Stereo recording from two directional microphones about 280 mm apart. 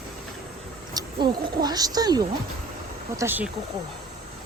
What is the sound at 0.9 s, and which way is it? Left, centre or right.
Speech, centre.